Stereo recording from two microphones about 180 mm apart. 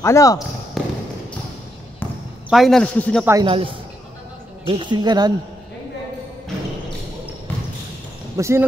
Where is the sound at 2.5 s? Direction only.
Centre (ahead or behind).